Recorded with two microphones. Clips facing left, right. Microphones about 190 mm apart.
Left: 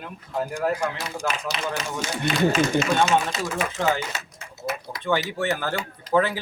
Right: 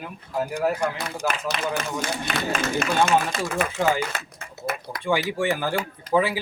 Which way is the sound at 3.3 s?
55° right (ahead or behind).